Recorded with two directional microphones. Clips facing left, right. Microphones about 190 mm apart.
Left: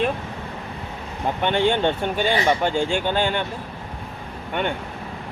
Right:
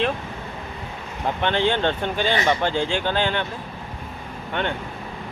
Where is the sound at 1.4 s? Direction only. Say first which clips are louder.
Left 2 dB; 10° left (ahead or behind).